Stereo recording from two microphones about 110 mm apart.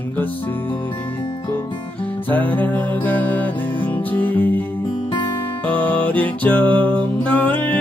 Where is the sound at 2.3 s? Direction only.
15° left (ahead or behind).